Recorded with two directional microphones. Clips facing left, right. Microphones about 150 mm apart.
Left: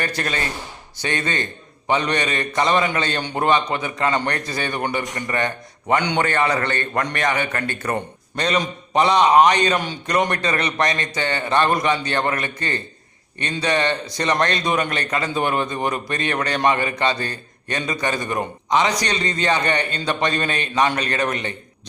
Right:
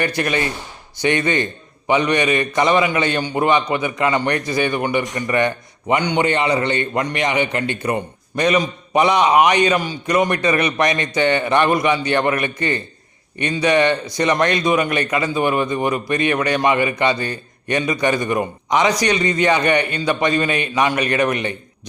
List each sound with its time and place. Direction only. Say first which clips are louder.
0.0 s a man's voice: right 5 dB; 15° right (ahead or behind)